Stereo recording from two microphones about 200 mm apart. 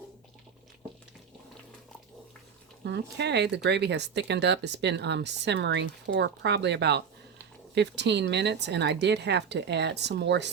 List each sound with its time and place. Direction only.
2.8 s speech: 60° right (ahead or behind)